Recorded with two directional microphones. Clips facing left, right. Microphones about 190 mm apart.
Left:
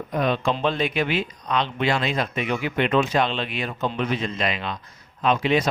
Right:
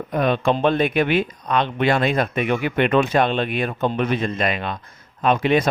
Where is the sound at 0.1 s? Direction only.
55° right (ahead or behind).